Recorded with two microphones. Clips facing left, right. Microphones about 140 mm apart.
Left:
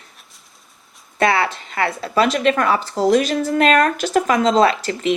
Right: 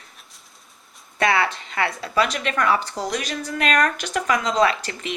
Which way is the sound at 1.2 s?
30° left (ahead or behind).